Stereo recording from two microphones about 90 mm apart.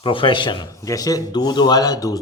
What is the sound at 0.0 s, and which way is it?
Speech, 70° left (ahead or behind).